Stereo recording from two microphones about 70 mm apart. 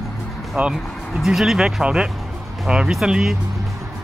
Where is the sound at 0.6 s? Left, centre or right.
Right.